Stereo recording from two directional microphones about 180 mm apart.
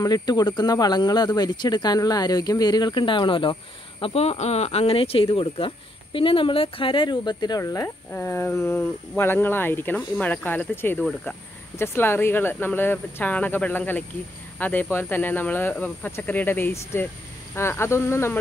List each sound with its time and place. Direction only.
0.0 s speech: 20° left (ahead or behind)